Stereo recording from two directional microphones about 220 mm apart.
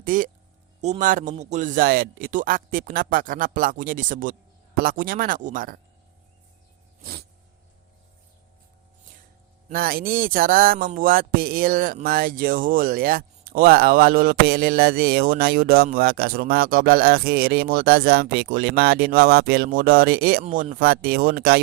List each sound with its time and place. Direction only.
0.0 s a man's voice: 40° right (ahead or behind)
7.0 s music: 45° right (ahead or behind)
9.6 s music: 40° right (ahead or behind)